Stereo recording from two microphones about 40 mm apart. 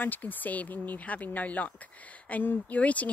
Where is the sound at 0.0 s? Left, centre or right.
Left.